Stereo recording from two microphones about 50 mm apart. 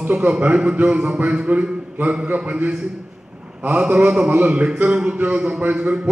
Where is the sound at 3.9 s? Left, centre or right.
Right.